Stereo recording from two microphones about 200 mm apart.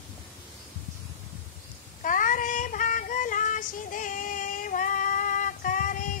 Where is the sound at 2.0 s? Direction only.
40° left (ahead or behind).